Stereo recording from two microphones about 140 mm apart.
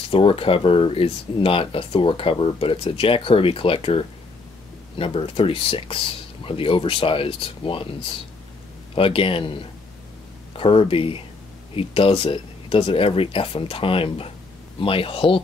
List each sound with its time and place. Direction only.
0.1 s speech: 40° left (ahead or behind)
8.9 s speech: 40° left (ahead or behind)